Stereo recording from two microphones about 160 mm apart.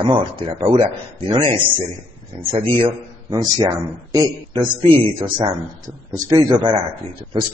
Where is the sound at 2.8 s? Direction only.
25° right (ahead or behind).